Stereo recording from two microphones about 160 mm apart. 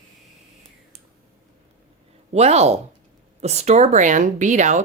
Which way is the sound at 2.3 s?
40° right (ahead or behind).